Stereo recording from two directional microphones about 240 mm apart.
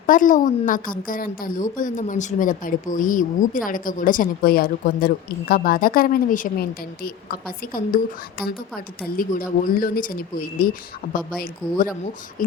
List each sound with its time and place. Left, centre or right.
0.0 s a woman's voice: left